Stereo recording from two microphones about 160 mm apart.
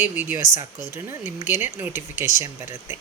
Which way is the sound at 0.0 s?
15° right (ahead or behind).